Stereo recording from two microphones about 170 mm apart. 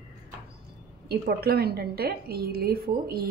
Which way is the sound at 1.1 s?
65° right (ahead or behind).